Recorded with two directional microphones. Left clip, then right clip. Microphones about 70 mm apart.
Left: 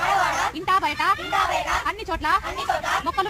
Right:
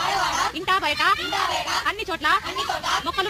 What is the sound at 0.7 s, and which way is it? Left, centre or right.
Speech, left.